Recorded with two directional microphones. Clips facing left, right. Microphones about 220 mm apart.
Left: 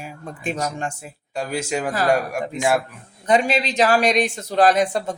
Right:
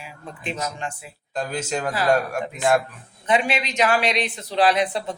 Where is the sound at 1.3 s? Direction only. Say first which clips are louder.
Left 2 dB; 10° left (ahead or behind).